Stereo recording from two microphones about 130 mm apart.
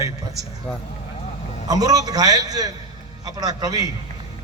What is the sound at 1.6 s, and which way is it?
A man's voice, 30° right (ahead or behind).